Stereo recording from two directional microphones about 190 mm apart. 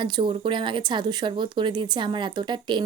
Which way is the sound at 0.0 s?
25° right (ahead or behind).